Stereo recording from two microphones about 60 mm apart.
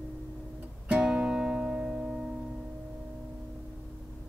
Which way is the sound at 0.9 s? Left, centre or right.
Centre.